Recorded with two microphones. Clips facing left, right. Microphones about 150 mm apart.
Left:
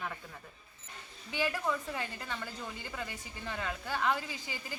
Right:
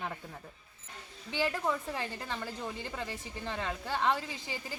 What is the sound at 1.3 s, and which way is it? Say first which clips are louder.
A woman's voice: right 1 dB; 25° right (ahead or behind).